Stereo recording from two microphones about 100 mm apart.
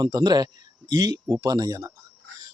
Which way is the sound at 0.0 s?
40° right (ahead or behind).